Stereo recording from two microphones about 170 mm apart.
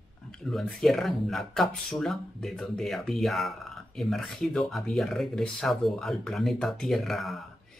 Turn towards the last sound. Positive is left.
turn(degrees=0)  # may be behind; listen again after turning